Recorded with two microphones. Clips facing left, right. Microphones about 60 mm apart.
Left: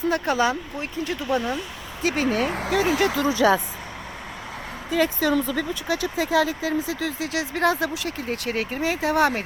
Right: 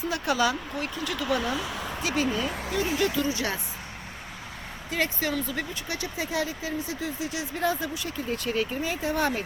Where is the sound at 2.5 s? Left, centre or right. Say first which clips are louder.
Left 6 dB; left.